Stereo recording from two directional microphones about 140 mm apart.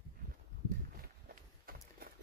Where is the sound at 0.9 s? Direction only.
90° right.